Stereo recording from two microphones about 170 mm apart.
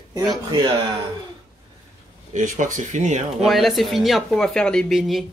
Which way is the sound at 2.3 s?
50° right (ahead or behind).